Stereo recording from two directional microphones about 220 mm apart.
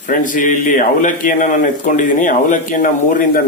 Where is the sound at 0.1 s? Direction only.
35° left (ahead or behind).